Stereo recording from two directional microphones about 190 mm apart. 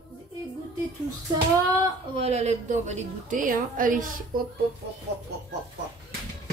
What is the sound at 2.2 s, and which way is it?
A woman's voice, 35° right (ahead or behind).